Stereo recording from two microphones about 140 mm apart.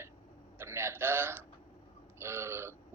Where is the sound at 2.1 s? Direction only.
20° right (ahead or behind).